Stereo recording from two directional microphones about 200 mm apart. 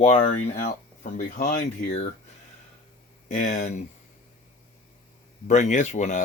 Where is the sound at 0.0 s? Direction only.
35° left (ahead or behind).